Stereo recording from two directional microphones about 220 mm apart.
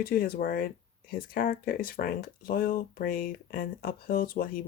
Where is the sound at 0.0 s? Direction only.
40° left (ahead or behind).